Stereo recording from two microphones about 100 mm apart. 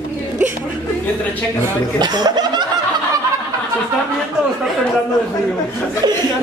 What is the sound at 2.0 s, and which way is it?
Speech, 45° right (ahead or behind).